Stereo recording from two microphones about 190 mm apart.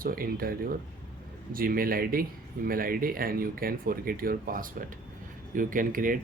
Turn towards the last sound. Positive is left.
turn(degrees=-45)  # may be behind; listen again after turning